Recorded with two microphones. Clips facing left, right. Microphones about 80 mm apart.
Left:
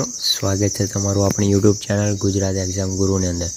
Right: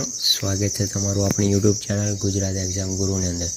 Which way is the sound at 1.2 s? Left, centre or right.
Left.